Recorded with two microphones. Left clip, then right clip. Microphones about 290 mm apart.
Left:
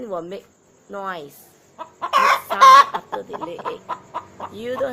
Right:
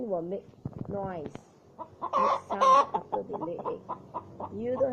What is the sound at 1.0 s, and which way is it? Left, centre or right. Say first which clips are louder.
Speech: left 7 dB; left.